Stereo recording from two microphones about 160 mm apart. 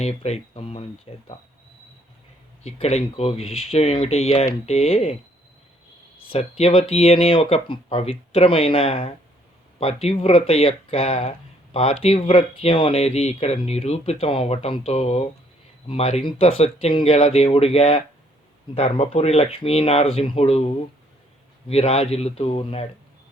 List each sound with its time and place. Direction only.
0.2 s speech: 40° left (ahead or behind)
2.6 s speech: 40° left (ahead or behind)
6.2 s speech: 35° left (ahead or behind)